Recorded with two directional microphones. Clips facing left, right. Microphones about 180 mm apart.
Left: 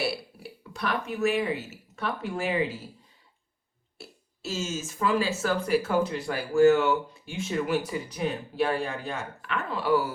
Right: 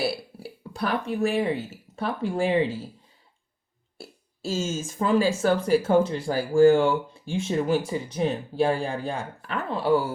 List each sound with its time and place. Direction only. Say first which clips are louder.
0.7 s speech: right 4 dB; 30° right (ahead or behind)
4.0 s speech: right 5 dB; 30° right (ahead or behind)